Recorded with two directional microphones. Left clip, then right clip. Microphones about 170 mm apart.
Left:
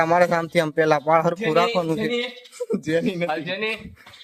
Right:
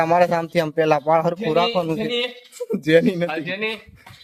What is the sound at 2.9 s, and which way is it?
Speech, 65° right (ahead or behind).